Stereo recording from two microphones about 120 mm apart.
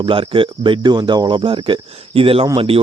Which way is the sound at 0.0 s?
45° right (ahead or behind).